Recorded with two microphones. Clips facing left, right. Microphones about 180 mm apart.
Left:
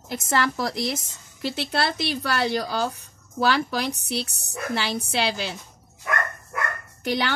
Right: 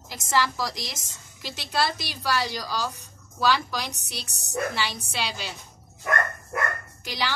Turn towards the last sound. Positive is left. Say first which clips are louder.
# left 6 dB
turn(degrees=60)  # may be behind; listen again after turning